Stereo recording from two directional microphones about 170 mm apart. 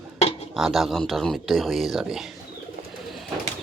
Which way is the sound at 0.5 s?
Centre (ahead or behind).